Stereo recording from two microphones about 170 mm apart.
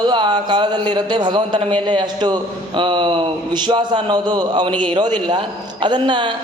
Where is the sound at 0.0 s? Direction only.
25° right (ahead or behind).